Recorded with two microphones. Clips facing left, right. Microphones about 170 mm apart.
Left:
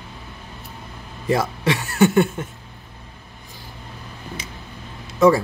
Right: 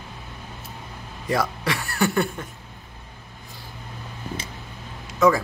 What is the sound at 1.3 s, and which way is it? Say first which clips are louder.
Speech: left 4 dB; 25° left (ahead or behind).